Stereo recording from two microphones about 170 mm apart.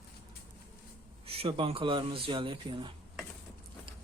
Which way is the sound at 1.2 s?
35° right (ahead or behind).